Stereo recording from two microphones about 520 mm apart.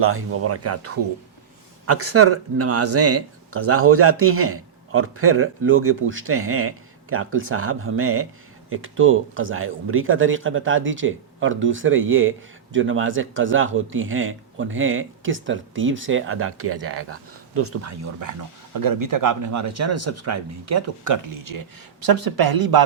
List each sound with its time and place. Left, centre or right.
0.0 s speech: right
1.9 s speech: right